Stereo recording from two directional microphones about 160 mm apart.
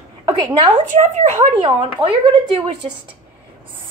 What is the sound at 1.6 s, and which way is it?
Speech, 35° right (ahead or behind).